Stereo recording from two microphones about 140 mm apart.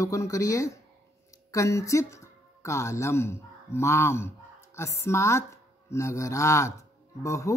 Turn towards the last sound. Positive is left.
turn(degrees=20)  # may be behind; listen again after turning